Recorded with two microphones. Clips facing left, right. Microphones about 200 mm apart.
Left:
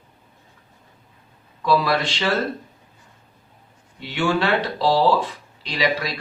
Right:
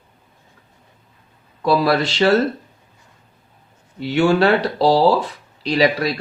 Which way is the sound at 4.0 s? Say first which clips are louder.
Right 7 dB; 40° right (ahead or behind).